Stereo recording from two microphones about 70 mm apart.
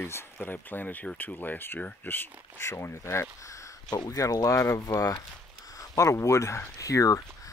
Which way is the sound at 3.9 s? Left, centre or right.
Left.